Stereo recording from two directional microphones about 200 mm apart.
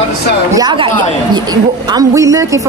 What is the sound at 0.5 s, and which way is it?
A woman's voice, 20° right (ahead or behind).